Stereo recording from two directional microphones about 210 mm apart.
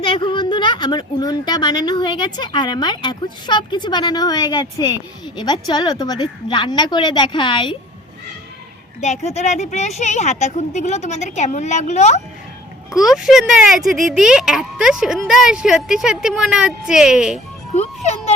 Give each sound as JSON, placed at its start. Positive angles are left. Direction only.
{"t": 0.0, "sound": "a woman's voice", "side_deg": 25}
{"t": 9.0, "sound": "a woman's voice", "side_deg": 30}
{"t": 13.0, "sound": "speech", "side_deg": 0}
{"t": 17.7, "sound": "music", "side_deg": 30}